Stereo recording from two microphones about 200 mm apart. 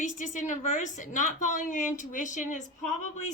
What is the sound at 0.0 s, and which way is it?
A woman's voice, 40° left (ahead or behind).